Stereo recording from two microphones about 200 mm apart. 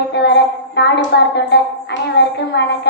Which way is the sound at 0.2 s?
60° left (ahead or behind).